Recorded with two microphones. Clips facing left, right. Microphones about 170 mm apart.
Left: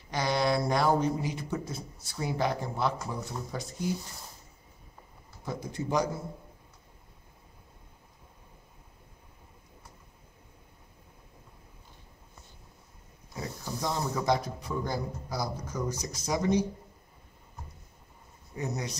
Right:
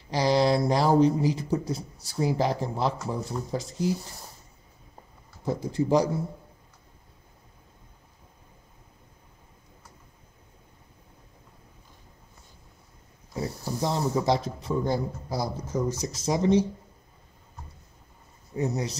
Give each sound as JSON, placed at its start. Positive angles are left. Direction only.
{"t": 0.1, "sound": "a man's voice", "side_deg": -30}
{"t": 5.4, "sound": "a man's voice", "side_deg": -30}
{"t": 13.3, "sound": "a man's voice", "side_deg": -30}
{"t": 18.6, "sound": "a man's voice", "side_deg": -30}